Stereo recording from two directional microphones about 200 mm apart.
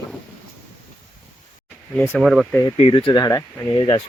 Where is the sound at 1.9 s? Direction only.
10° left (ahead or behind).